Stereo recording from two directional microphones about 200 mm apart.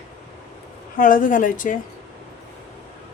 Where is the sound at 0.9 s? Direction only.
45° left (ahead or behind).